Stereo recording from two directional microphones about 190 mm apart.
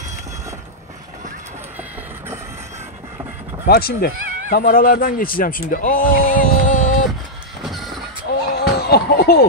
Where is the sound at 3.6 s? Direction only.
50° left (ahead or behind).